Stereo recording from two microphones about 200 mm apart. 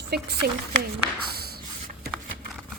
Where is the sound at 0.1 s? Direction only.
55° right (ahead or behind).